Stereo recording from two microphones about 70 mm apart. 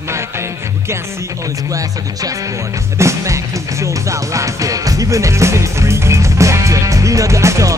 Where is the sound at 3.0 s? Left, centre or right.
Right.